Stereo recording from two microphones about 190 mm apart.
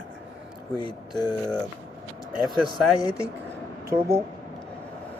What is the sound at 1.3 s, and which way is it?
Speech, 5° left (ahead or behind).